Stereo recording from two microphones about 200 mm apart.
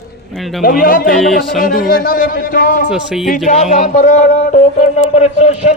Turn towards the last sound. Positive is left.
turn(degrees=35)  # may be behind; listen again after turning